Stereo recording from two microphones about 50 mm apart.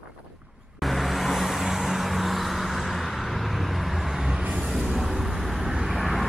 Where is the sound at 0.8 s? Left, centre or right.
Centre.